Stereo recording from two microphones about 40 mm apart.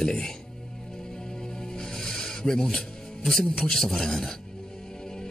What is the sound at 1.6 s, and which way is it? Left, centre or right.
Music, centre.